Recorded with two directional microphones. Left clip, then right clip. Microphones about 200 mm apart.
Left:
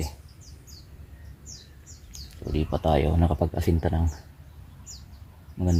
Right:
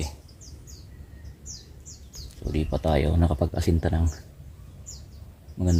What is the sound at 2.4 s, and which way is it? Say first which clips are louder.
Speech: left 1 dB; 15° left (ahead or behind).